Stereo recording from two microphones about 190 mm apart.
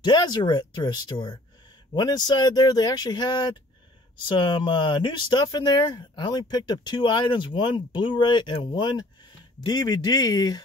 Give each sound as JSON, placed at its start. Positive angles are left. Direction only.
{"t": 0.0, "sound": "speech", "side_deg": 20}